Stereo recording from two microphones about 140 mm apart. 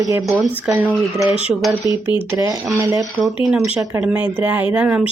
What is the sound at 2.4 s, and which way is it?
Speech, 25° right (ahead or behind).